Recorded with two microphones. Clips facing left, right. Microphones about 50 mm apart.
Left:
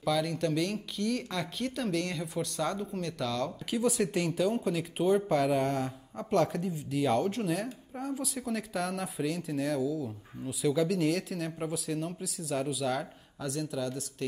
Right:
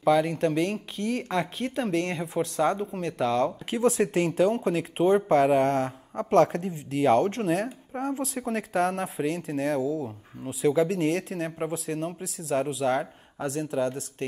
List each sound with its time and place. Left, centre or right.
0.0 s speech: right
8.0 s speech: right
8.4 s speech: right